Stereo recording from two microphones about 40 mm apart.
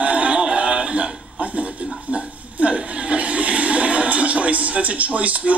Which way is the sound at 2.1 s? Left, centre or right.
Right.